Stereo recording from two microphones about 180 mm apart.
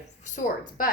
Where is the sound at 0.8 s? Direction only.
50° left (ahead or behind).